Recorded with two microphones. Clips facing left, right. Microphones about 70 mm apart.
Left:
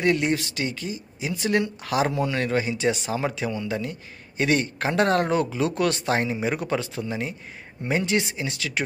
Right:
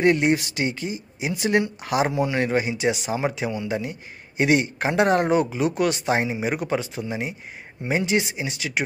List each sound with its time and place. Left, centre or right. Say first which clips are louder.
0.0 s speech: right 3 dB; right